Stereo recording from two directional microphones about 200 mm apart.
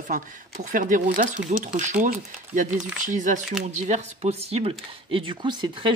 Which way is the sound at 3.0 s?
40° right (ahead or behind).